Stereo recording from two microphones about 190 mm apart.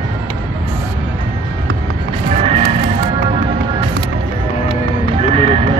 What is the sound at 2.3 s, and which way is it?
Music, 30° right (ahead or behind).